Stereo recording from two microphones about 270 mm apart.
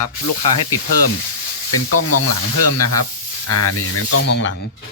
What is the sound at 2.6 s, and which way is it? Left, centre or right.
Speech, left.